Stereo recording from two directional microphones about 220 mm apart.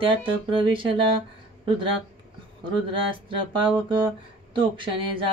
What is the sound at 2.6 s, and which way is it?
Speech, 25° right (ahead or behind).